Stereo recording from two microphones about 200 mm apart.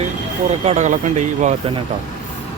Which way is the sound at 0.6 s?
35° right (ahead or behind).